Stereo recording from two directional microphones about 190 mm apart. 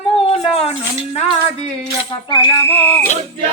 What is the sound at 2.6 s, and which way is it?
Speech, 10° left (ahead or behind).